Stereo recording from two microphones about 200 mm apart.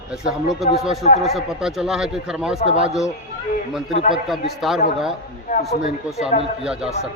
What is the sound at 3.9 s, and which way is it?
Speech, 35° left (ahead or behind).